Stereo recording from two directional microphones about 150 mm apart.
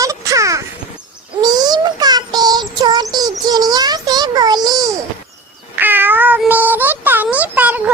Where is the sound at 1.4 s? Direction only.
25° right (ahead or behind).